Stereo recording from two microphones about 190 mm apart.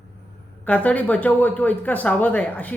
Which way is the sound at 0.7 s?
5° left (ahead or behind).